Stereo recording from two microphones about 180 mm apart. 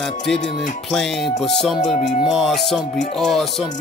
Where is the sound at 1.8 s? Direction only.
40° left (ahead or behind).